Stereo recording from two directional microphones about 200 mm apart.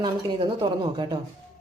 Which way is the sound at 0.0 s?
25° right (ahead or behind).